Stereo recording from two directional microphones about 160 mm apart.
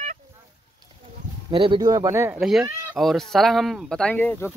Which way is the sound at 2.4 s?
Centre (ahead or behind).